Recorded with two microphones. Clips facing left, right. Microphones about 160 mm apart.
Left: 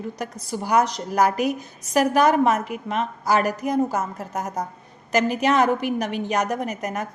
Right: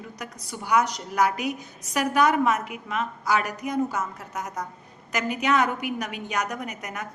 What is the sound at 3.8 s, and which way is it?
Speech, 45° left (ahead or behind).